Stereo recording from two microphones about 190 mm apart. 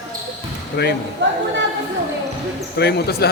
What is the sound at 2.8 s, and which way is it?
Speech, 60° left (ahead or behind).